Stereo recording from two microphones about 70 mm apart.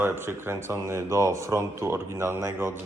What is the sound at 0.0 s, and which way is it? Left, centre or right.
Speech, right.